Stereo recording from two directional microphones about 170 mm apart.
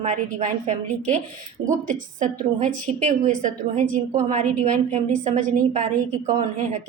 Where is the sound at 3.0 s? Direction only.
45° right (ahead or behind).